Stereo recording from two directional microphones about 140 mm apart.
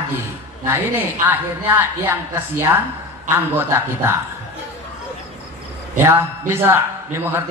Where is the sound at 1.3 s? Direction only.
15° right (ahead or behind).